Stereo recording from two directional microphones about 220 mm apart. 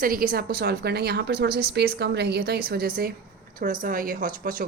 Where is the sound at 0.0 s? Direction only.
40° right (ahead or behind).